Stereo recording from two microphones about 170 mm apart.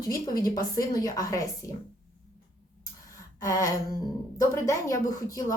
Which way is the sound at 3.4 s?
20° left (ahead or behind).